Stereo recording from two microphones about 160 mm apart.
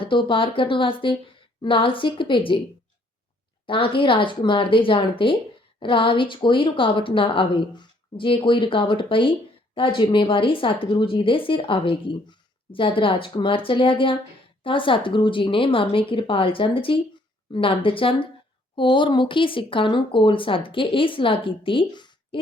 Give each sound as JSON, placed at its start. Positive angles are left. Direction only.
{"t": 0.0, "sound": "a woman's voice", "side_deg": 30}
{"t": 3.7, "sound": "a woman's voice", "side_deg": 30}